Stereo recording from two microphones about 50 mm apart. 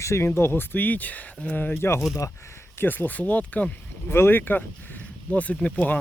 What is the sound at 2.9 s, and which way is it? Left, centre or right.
Speech, left.